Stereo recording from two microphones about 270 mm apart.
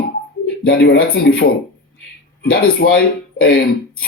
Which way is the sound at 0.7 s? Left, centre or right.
Left.